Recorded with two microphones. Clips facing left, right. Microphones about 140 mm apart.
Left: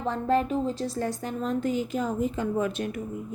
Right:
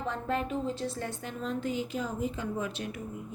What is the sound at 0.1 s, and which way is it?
A woman's voice, 35° left (ahead or behind).